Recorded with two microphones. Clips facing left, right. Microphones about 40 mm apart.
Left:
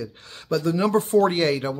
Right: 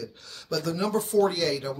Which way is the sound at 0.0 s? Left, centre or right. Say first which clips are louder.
Left 4 dB; left.